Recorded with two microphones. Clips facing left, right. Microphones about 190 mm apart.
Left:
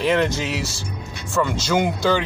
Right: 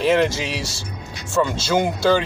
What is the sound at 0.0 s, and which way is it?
Speech, 10° right (ahead or behind).